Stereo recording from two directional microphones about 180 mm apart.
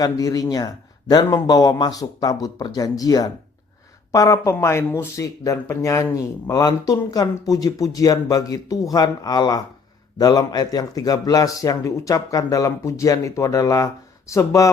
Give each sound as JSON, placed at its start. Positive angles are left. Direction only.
{"t": 0.0, "sound": "a man's voice", "side_deg": 20}